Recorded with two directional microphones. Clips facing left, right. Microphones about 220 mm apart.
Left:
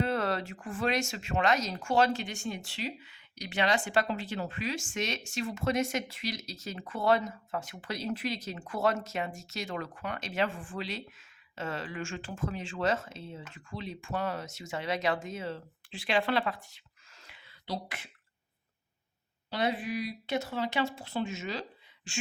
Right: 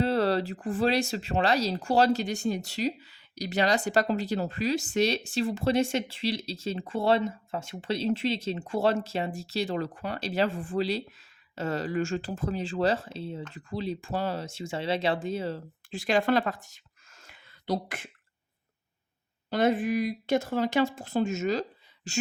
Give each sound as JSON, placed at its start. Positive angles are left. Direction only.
{"t": 0.0, "sound": "speech", "side_deg": -35}
{"t": 19.5, "sound": "speech", "side_deg": -50}